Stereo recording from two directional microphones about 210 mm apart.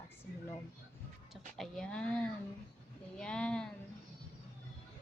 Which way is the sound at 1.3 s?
Centre (ahead or behind).